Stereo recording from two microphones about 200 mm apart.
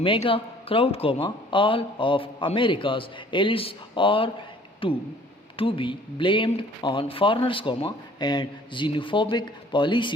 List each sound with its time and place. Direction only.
0.0 s speech: 25° left (ahead or behind)